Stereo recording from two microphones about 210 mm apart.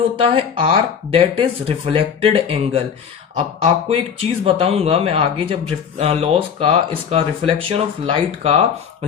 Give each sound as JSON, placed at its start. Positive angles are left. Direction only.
{"t": 0.2, "sound": "speech", "side_deg": -25}